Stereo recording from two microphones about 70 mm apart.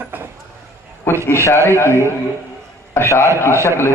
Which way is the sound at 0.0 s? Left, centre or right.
Right.